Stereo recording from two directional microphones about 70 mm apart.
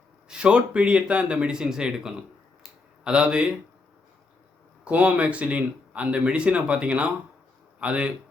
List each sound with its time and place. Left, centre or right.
0.3 s speech: centre
2.6 s a sound: centre
4.9 s speech: centre